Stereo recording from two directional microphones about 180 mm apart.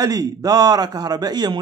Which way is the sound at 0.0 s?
20° right (ahead or behind).